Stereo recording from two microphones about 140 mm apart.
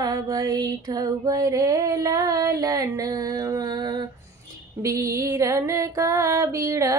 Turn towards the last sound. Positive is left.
turn(degrees=-25)  # may be behind; listen again after turning